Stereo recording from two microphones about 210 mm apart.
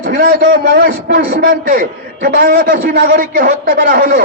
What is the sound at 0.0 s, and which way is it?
A man's voice, 45° right (ahead or behind).